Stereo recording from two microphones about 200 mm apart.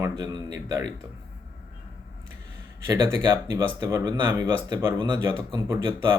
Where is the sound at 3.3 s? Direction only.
15° right (ahead or behind).